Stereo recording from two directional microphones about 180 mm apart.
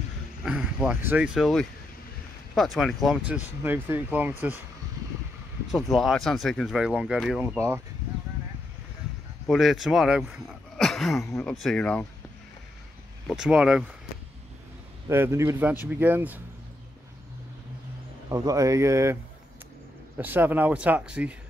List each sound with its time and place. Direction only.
0.4 s speech: centre (ahead or behind)
5.7 s speech: centre (ahead or behind)
7.5 s speech: 15° right (ahead or behind)
9.5 s speech: centre (ahead or behind)
13.3 s speech: 5° right (ahead or behind)
15.0 s speech: 15° right (ahead or behind)
18.3 s speech: 20° right (ahead or behind)
20.2 s speech: 10° right (ahead or behind)